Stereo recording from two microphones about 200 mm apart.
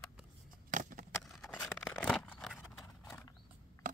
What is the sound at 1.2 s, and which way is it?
Vehicle, centre (ahead or behind).